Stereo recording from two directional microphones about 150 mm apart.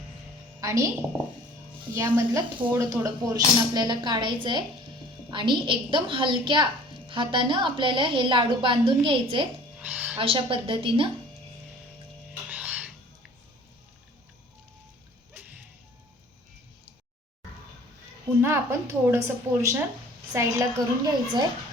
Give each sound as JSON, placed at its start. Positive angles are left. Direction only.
{"t": 0.6, "sound": "a woman's voice", "side_deg": -20}
{"t": 2.0, "sound": "a woman's voice", "side_deg": -15}
{"t": 9.8, "sound": "a sound", "side_deg": -10}
{"t": 10.2, "sound": "a woman's voice", "side_deg": -35}
{"t": 12.5, "sound": "music", "side_deg": -10}
{"t": 18.4, "sound": "a woman's voice", "side_deg": -15}